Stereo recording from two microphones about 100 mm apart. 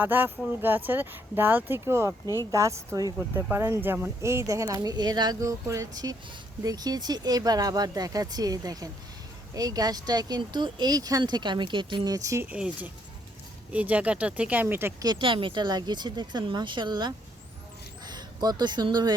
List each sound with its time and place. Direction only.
0.0 s speech: 20° right (ahead or behind)
3.2 s speech: 20° right (ahead or behind); by 12.0 s 55° right (ahead or behind)
12.0 s speech: 35° right (ahead or behind)
12.5 s speech: 10° right (ahead or behind)
14.9 s speech: 40° right (ahead or behind)
15.2 s speech: 60° right (ahead or behind); by 19.1 s 45° right (ahead or behind)